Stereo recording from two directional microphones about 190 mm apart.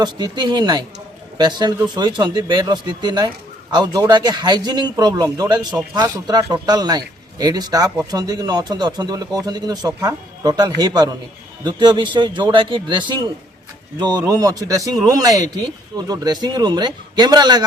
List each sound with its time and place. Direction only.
0.0 s a man's voice: 20° right (ahead or behind)